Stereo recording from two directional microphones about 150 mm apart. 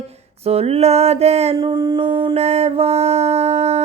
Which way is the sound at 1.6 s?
25° right (ahead or behind).